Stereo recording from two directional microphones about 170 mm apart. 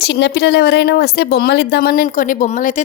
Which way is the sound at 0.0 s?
90° left.